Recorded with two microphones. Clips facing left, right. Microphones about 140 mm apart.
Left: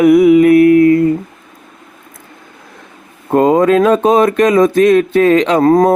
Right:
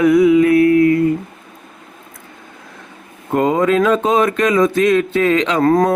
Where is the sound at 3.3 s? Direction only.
40° left (ahead or behind).